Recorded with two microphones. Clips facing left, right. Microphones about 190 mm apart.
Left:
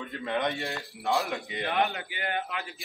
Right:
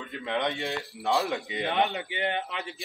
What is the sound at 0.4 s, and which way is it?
A man's voice, 20° right (ahead or behind).